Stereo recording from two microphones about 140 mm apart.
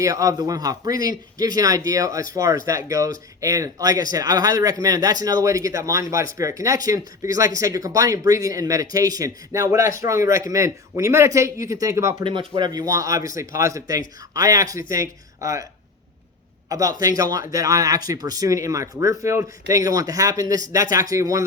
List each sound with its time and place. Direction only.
0.0 s speech: 25° right (ahead or behind)
12.2 s speech: 35° right (ahead or behind)
16.6 s a man's voice: 25° right (ahead or behind)